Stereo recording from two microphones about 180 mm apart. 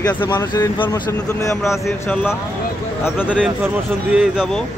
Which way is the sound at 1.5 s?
Centre (ahead or behind).